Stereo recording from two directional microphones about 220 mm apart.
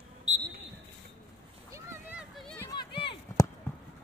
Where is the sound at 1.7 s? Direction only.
10° right (ahead or behind).